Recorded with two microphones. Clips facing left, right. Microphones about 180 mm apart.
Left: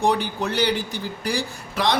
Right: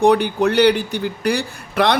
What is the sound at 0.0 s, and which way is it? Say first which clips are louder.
A man's voice: right 8 dB; 60° right (ahead or behind).